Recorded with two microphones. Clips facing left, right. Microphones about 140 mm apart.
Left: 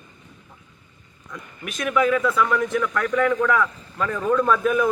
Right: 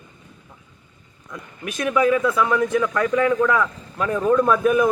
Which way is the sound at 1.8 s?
20° right (ahead or behind).